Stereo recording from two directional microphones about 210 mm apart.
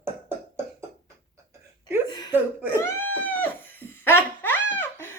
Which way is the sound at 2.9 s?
10° left (ahead or behind).